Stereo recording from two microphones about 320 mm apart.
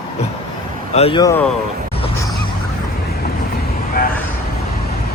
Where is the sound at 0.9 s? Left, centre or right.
Centre.